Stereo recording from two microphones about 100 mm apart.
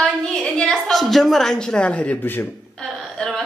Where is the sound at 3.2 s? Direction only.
Centre (ahead or behind).